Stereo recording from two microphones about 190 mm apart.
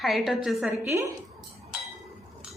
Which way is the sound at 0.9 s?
15° right (ahead or behind).